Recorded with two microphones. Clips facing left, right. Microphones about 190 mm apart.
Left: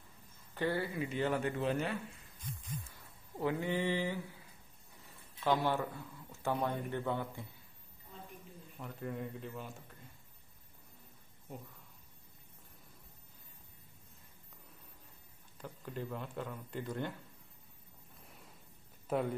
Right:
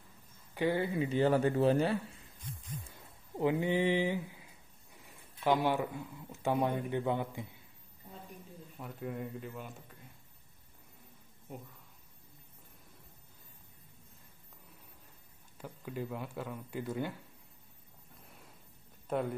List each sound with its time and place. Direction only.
0.6 s speech: 20° right (ahead or behind); by 2.0 s 35° right (ahead or behind)
2.9 s a sound: 20° right (ahead or behind)
5.0 s speech: 15° right (ahead or behind)
8.7 s a man's voice: 5° right (ahead or behind)
15.5 s speech: 5° right (ahead or behind)
19.0 s speech: centre (ahead or behind)